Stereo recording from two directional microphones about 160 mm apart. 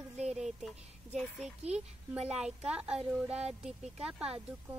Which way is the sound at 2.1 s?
40° right (ahead or behind).